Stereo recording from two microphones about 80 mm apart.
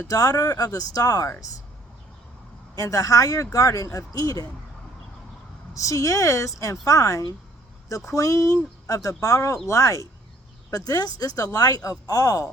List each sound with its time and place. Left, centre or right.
0.1 s speech: left
2.7 s speech: left
5.7 s speech: left